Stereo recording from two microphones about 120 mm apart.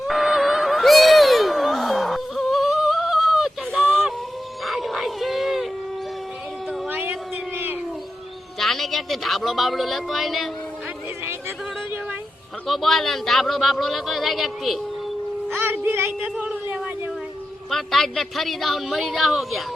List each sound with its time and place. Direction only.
0.1 s music: centre (ahead or behind)
6.8 s a sound: 15° right (ahead or behind)
8.5 s a woman's voice: centre (ahead or behind)
11.3 s yodeling: 20° right (ahead or behind)
12.6 s speech: centre (ahead or behind)
15.4 s a sound: 15° right (ahead or behind)
16.2 s speech: 5° right (ahead or behind)
16.6 s a sound: 15° right (ahead or behind)
17.7 s speech: centre (ahead or behind)